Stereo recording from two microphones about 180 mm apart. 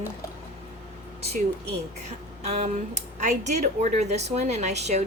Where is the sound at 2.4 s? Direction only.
35° right (ahead or behind).